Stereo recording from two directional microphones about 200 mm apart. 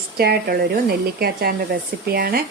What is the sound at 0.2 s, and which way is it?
Speech, 50° right (ahead or behind).